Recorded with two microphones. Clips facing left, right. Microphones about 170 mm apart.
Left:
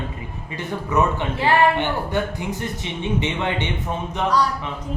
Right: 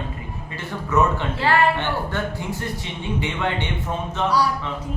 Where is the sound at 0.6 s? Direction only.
15° left (ahead or behind).